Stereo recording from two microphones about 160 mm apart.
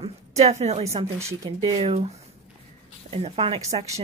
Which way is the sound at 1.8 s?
40° right (ahead or behind).